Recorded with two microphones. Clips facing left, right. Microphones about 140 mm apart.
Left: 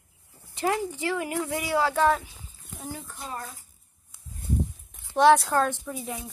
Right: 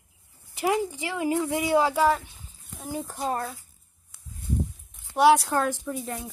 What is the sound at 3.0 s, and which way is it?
Speech, 50° right (ahead or behind).